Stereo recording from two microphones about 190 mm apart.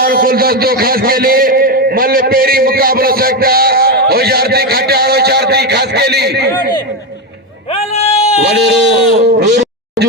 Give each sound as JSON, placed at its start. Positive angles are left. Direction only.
{"t": 0.0, "sound": "a man's voice", "side_deg": -50}
{"t": 7.7, "sound": "a sound", "side_deg": 30}
{"t": 8.4, "sound": "speech", "side_deg": -65}